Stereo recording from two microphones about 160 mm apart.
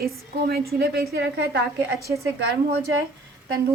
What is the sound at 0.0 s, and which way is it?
A woman's voice, 75° right (ahead or behind).